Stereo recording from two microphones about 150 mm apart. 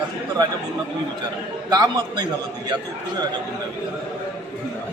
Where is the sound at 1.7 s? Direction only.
30° right (ahead or behind).